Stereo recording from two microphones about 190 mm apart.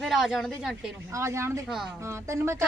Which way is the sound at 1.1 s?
15° right (ahead or behind).